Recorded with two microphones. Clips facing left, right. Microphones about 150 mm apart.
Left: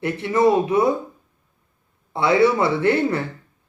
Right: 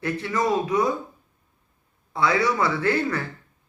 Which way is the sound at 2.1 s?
25° left (ahead or behind).